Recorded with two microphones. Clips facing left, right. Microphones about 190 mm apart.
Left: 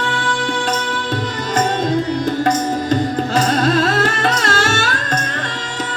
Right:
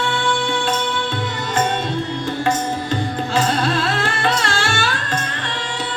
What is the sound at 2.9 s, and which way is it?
Music, 40° left (ahead or behind).